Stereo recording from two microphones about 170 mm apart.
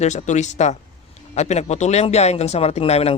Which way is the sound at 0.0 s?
45° left (ahead or behind).